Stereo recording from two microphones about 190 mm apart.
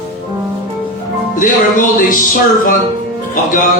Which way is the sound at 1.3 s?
45° left (ahead or behind).